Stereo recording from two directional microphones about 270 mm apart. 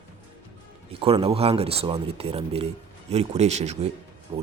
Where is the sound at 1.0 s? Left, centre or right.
Right.